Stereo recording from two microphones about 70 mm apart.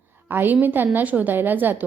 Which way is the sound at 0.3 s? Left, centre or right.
Right.